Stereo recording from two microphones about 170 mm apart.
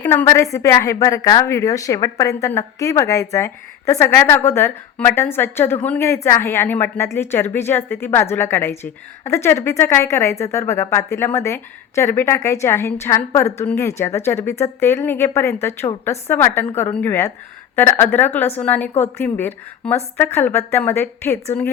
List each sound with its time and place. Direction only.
0.0 s a woman's voice: 10° left (ahead or behind)